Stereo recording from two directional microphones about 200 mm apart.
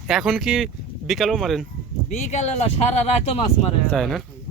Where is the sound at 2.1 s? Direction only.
35° left (ahead or behind).